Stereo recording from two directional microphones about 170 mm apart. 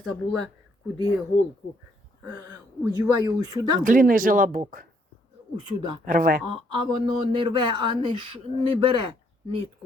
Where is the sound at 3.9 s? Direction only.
55° right (ahead or behind).